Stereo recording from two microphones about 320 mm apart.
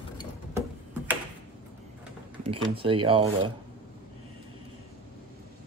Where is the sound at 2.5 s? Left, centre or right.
Centre.